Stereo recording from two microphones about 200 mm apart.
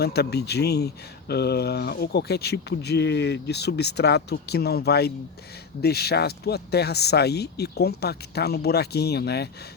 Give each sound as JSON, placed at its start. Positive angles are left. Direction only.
{"t": 0.0, "sound": "speech", "side_deg": 55}